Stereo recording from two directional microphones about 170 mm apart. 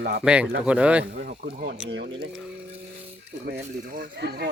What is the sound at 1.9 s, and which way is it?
Speech, 90° right.